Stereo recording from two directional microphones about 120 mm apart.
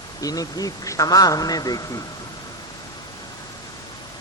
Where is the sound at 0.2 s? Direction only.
30° left (ahead or behind).